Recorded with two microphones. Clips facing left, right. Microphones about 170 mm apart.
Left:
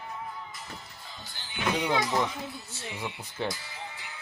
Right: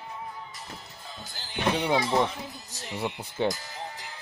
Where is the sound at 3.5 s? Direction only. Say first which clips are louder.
Right 5 dB; 40° right (ahead or behind).